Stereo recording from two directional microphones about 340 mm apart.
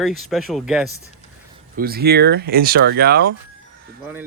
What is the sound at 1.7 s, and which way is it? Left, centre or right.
Speech, right.